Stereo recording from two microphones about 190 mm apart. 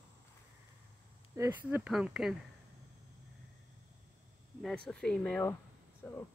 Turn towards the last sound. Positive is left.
turn(degrees=5)  # may be behind; listen again after turning